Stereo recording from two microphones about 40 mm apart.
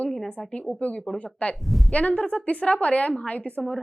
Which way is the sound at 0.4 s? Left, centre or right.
Left.